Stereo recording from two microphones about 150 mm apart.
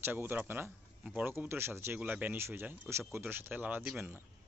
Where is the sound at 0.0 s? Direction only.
15° right (ahead or behind).